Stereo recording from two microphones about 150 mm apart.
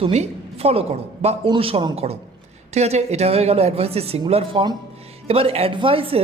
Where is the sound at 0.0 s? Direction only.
45° right (ahead or behind).